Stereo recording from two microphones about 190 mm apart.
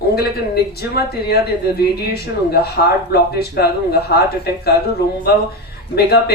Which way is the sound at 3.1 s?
55° left (ahead or behind).